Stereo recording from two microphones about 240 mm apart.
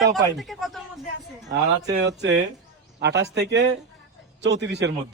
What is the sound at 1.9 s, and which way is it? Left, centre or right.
A man's voice, right.